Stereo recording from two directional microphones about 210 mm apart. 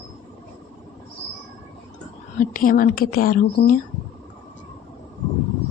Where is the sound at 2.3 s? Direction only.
40° left (ahead or behind).